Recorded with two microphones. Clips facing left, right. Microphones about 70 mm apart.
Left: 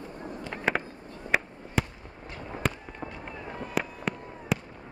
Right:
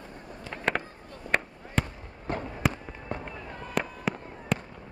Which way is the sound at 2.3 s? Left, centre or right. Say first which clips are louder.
Right 11 dB; right.